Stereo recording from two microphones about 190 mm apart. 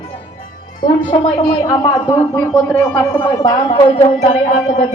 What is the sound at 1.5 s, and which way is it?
A woman's voice, 20° left (ahead or behind).